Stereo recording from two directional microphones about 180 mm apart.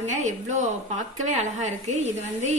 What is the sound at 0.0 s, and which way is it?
Speech, 40° right (ahead or behind).